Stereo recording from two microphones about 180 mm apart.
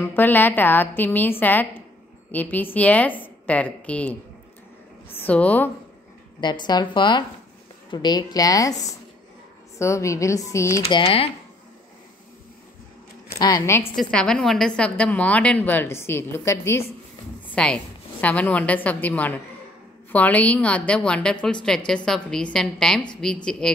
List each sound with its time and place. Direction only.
0.0 s a woman's voice: 10° left (ahead or behind)
6.4 s a woman's voice: 25° left (ahead or behind)
10.8 s speech: 30° left (ahead or behind)
13.4 s a woman's voice: 20° left (ahead or behind)
13.9 s a woman's voice: 5° left (ahead or behind)